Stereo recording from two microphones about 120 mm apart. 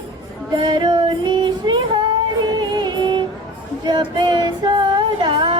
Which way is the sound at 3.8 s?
35° right (ahead or behind).